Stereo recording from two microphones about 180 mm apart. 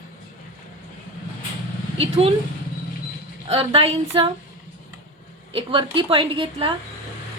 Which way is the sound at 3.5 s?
35° right (ahead or behind).